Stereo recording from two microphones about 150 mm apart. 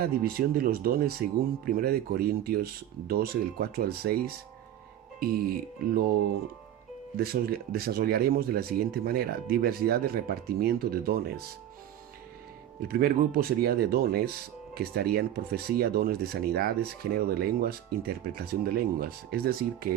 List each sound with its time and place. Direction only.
0.0 s speech: 80° right
5.2 s speech: 85° right
7.2 s speech: 90° right
12.9 s speech: 90° right